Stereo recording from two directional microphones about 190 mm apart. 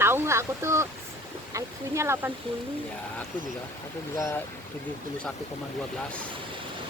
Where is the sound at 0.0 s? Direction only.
15° right (ahead or behind).